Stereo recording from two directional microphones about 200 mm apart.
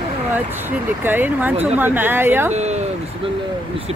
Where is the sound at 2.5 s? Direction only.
35° right (ahead or behind).